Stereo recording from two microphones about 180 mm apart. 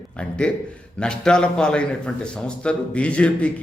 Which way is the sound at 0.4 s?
5° left (ahead or behind).